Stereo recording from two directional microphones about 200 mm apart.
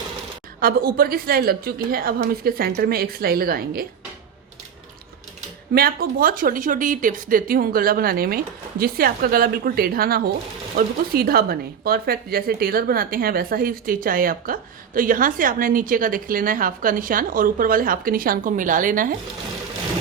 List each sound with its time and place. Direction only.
0.6 s speech: 45° right (ahead or behind)
5.7 s speech: 50° right (ahead or behind)